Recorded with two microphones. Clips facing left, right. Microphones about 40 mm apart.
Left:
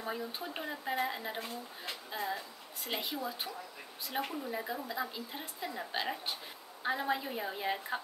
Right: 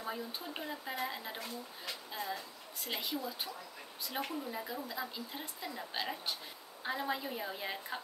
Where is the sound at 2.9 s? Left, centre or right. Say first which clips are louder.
Left 2 dB; centre.